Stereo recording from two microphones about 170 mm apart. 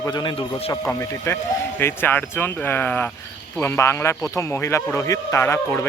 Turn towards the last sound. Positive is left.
turn(degrees=15)  # may be behind; listen again after turning